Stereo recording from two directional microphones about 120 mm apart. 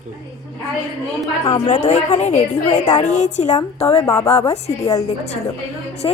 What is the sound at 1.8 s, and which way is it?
A woman's voice, 80° left.